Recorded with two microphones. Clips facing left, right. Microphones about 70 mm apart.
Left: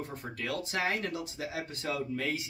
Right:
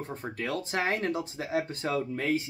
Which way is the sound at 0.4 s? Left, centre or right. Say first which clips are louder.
Right 2 dB; right.